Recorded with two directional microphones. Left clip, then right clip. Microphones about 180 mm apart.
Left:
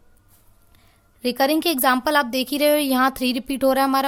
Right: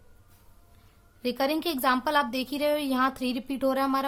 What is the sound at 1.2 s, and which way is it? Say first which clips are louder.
A woman's voice: left 8 dB; 40° left (ahead or behind).